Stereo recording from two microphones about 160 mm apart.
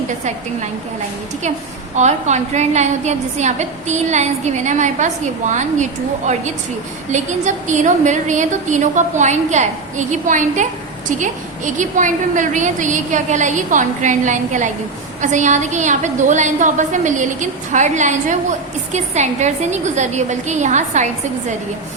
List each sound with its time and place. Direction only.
2.0 s a woman's voice: 45° right (ahead or behind)